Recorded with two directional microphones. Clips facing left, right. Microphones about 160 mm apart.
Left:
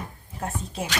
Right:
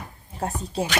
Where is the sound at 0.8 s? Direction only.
35° right (ahead or behind).